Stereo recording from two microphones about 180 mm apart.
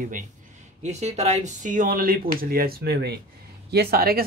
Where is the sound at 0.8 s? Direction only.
40° right (ahead or behind).